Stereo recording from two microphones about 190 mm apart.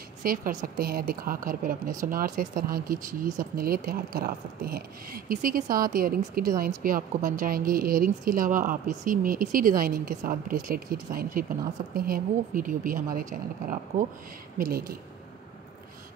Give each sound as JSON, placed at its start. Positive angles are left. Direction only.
{"t": 0.2, "sound": "a woman's voice", "side_deg": -45}